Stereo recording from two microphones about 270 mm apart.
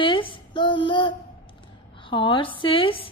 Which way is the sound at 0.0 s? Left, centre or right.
Centre.